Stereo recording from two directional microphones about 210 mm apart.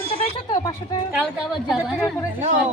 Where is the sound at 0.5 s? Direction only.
15° left (ahead or behind).